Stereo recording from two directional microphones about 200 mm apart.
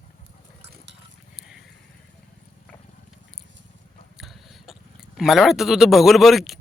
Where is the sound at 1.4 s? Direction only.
Centre (ahead or behind).